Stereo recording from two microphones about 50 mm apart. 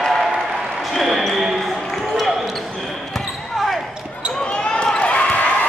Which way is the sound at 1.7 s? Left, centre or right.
Centre.